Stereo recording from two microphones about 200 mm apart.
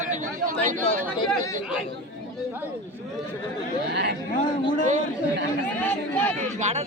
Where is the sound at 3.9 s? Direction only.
60° right (ahead or behind).